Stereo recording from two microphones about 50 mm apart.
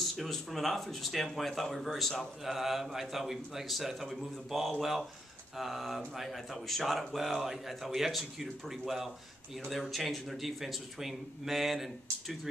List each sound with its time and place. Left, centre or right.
0.0 s speech: centre